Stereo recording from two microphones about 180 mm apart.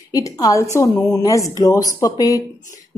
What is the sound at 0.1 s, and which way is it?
A woman's voice, 20° left (ahead or behind).